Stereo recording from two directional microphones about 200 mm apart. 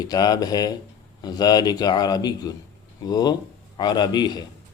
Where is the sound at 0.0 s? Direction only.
20° left (ahead or behind).